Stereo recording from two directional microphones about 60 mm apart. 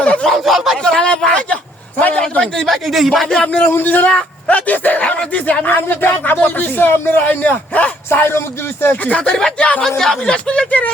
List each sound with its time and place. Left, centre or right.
0.0 s a sound: centre
0.3 s speech: centre
0.9 s a man's voice: centre
2.4 s a man's voice: centre
3.7 s speech: left
8.1 s speech: left
9.0 s speech: centre
10.0 s a man's voice: centre
10.3 s speech: centre